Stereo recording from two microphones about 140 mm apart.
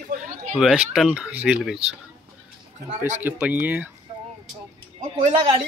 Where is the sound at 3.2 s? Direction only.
10° right (ahead or behind).